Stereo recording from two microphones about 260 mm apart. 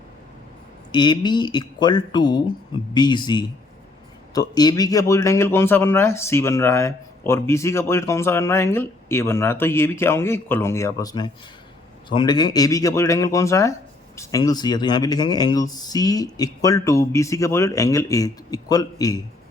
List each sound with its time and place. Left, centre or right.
0.9 s speech: centre